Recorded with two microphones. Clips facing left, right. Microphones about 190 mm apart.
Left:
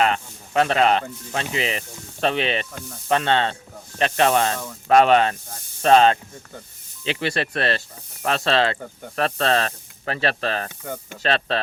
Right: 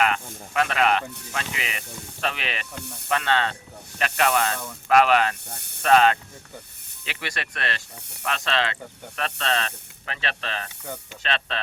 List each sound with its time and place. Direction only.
0.0 s speech: 30° left (ahead or behind)
2.8 s speech: 65° right (ahead or behind)
3.1 s speech: 30° left (ahead or behind)
5.5 s speech: 65° right (ahead or behind)
5.8 s speech: 30° left (ahead or behind)